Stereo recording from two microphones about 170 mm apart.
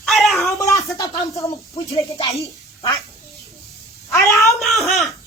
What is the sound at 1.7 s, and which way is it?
Speech, 35° left (ahead or behind).